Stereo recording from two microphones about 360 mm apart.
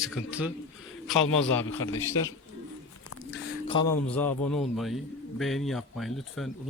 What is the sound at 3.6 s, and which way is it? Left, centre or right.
A man's voice, centre.